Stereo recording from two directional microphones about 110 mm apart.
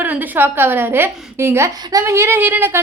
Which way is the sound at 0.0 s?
15° right (ahead or behind).